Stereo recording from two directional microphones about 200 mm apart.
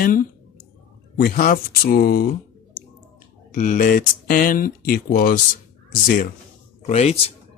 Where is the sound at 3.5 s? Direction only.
40° left (ahead or behind).